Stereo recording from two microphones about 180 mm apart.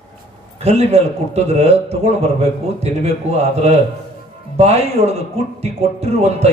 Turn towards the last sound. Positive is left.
turn(degrees=-35)  # may be behind; listen again after turning